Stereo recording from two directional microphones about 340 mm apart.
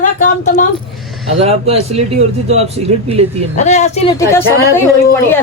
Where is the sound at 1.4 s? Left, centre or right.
Centre.